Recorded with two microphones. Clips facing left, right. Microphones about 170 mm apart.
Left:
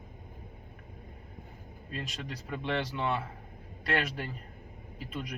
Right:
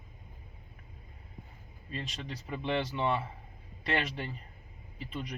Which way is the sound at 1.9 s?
Centre (ahead or behind).